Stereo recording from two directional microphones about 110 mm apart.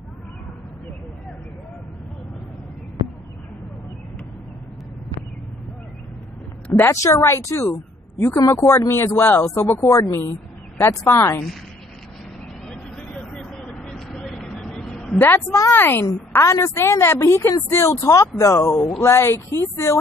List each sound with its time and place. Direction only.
6.8 s a woman's voice: 30° left (ahead or behind)
12.6 s vehicle: 5° left (ahead or behind)
15.1 s a woman's voice: 20° left (ahead or behind)